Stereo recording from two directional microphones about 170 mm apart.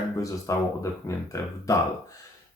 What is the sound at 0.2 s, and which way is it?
Speech, 20° left (ahead or behind).